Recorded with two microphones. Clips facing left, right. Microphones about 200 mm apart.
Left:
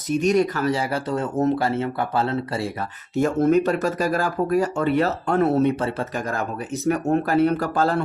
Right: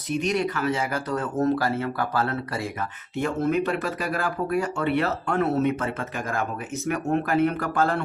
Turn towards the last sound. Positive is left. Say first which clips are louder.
# left 3 dB
turn(degrees=35)  # may be behind; listen again after turning